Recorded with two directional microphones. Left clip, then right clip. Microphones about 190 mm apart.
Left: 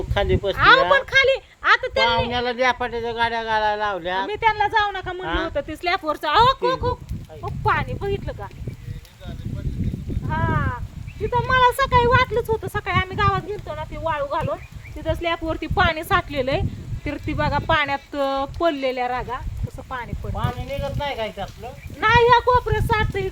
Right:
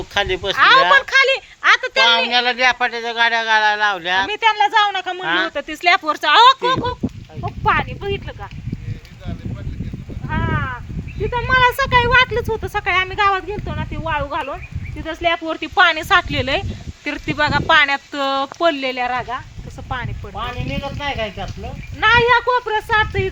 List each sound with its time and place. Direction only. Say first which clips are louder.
0.1 s speech: right 3 dB; 15° left (ahead or behind)
0.5 s speech: right 3 dB; 10° right (ahead or behind)
0.9 s a sound: right 4 dB; 10° right (ahead or behind)
2.3 s speech: right 5 dB; 20° left (ahead or behind)
4.3 s speech: right 2 dB; 10° right (ahead or behind)
7.4 s speech: right 4 dB; 40° right (ahead or behind)
10.2 s sheep: right 2 dB; 50° right (ahead or behind)
11.3 s speech: right 2 dB; 50° right (ahead or behind)
15.0 s speech: right 4 dB; 30° right (ahead or behind)
15.4 s speech: right 6 dB; 15° right (ahead or behind)
19.9 s speech: right 4 dB; 50° right (ahead or behind)